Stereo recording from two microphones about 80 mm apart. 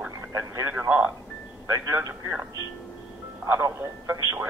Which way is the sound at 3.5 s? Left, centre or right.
Right.